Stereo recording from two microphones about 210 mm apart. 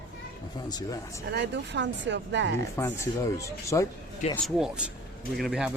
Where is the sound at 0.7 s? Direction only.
20° left (ahead or behind).